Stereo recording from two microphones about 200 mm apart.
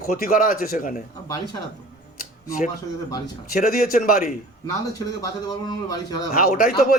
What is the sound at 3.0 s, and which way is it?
Speech, 20° left (ahead or behind).